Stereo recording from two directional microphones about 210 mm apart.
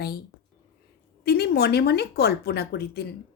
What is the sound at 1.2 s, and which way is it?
Speech, 50° left (ahead or behind).